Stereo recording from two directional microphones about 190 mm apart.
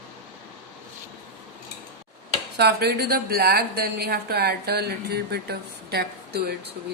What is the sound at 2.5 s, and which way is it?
A woman's voice, 60° right (ahead or behind).